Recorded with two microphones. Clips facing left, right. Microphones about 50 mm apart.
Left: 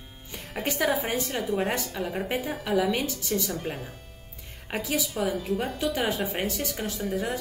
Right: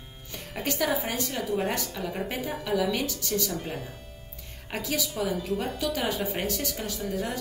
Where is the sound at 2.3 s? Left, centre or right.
Centre.